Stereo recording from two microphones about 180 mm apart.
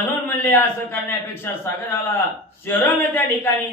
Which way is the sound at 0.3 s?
10° left (ahead or behind).